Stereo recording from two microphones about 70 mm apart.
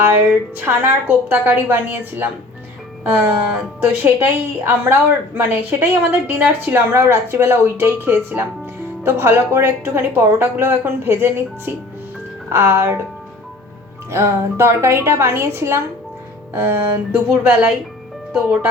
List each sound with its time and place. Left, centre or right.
0.0 s a woman's voice: right
14.1 s speech: right